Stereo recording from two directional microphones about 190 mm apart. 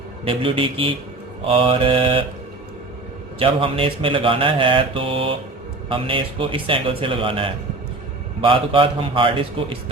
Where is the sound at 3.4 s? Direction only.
30° right (ahead or behind).